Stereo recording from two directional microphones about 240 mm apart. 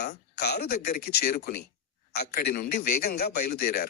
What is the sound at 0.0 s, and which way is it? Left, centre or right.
A man's voice, left.